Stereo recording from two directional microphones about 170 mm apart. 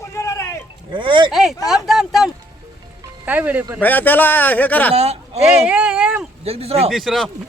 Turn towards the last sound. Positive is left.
turn(degrees=0)  # may be behind; listen again after turning